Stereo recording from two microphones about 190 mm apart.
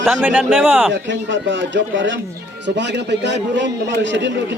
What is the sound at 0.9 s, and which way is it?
Speech, 70° right (ahead or behind).